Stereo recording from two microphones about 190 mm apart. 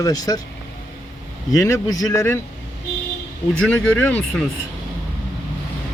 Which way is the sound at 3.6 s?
5° left (ahead or behind).